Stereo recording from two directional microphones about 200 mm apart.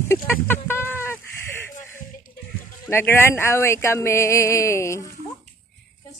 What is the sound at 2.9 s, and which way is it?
Speech, 10° left (ahead or behind).